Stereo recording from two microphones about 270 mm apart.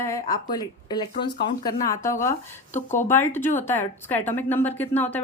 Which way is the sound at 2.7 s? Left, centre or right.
Left.